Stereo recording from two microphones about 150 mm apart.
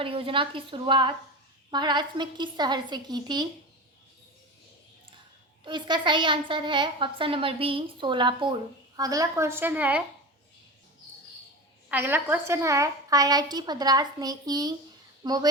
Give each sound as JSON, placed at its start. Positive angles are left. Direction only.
{"t": 0.0, "sound": "a woman's voice", "side_deg": -35}
{"t": 5.6, "sound": "a woman's voice", "side_deg": -30}
{"t": 11.9, "sound": "a woman's voice", "side_deg": -15}